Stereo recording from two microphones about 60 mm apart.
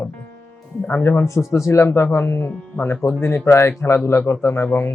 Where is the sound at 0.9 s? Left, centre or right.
Left.